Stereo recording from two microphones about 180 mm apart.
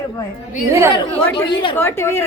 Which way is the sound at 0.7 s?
15° right (ahead or behind).